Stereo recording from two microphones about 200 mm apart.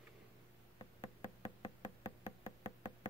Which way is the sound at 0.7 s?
25° left (ahead or behind).